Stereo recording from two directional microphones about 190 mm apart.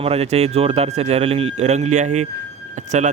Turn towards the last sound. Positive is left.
turn(degrees=-40)  # may be behind; listen again after turning